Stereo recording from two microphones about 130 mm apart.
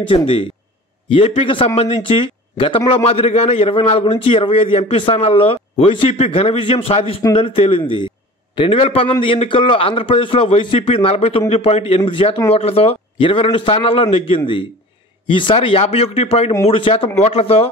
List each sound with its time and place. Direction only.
0.1 s a man's voice: 45° left (ahead or behind)